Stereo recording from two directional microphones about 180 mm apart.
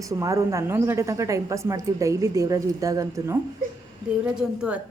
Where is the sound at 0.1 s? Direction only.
15° right (ahead or behind).